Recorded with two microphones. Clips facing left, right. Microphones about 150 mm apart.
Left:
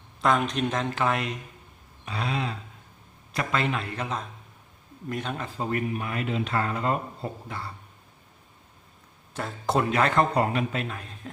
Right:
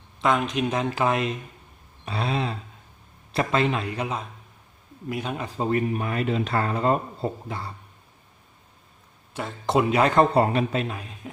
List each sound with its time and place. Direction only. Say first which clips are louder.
0.2 s a man's voice: right 1 dB; centre (ahead or behind)
5.5 s speech: right 5 dB; 25° right (ahead or behind)
9.3 s speech: right 3 dB; centre (ahead or behind)
9.9 s speech: right 4 dB; 15° right (ahead or behind)
10.3 s a man's voice: right 4 dB; 30° right (ahead or behind); by 11.3 s 10° right (ahead or behind)